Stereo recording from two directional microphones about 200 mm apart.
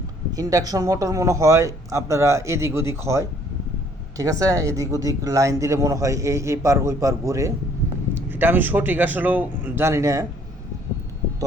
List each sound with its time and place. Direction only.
0.3 s speech: 15° right (ahead or behind)